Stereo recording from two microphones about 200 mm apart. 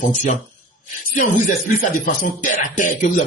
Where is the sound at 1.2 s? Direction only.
40° left (ahead or behind).